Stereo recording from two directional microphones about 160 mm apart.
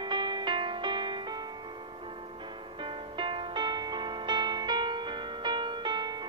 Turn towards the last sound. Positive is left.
turn(degrees=-25)  # may be behind; listen again after turning